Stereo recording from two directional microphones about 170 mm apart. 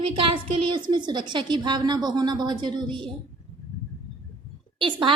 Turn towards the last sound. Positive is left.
turn(degrees=-30)  # may be behind; listen again after turning